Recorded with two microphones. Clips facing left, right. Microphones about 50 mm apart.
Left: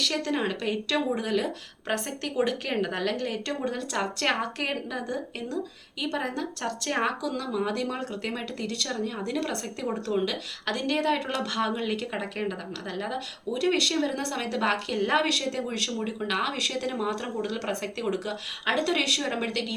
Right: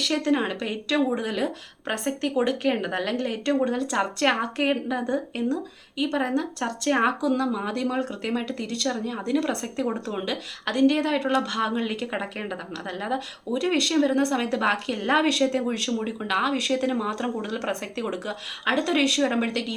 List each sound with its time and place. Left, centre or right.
0.0 s speech: centre